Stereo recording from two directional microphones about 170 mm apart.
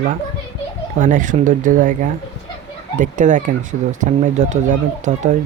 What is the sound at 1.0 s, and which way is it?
Speech, 50° right (ahead or behind).